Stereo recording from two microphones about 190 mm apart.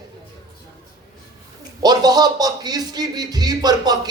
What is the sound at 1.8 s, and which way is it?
Speech, 20° right (ahead or behind).